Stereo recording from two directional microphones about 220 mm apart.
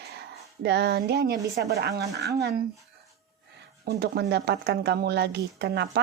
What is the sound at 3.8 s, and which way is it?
Speech, 45° right (ahead or behind).